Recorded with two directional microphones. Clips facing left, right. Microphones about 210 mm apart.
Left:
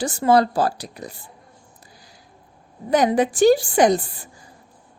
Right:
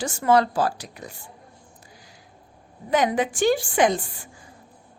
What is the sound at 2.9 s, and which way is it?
A woman's voice, 35° left (ahead or behind).